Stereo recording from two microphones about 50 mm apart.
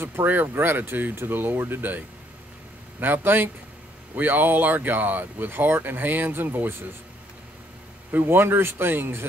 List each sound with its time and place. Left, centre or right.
0.0 s a man's voice: right
8.1 s a man's voice: right